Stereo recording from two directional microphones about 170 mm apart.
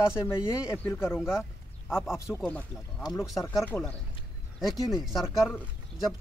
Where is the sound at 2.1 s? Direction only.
15° left (ahead or behind).